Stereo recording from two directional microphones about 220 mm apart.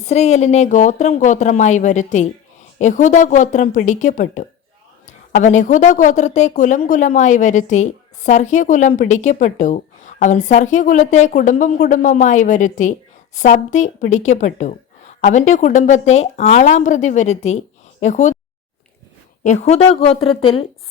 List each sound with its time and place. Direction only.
0.0 s a woman's voice: 30° left (ahead or behind)
19.4 s a woman's voice: 35° left (ahead or behind)